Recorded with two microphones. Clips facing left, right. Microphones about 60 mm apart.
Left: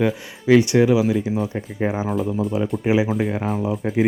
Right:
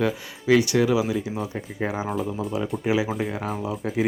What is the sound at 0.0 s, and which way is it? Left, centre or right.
Speech, left.